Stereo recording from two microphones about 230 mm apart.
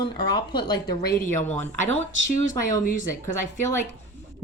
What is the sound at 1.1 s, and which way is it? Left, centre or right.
Speech, left.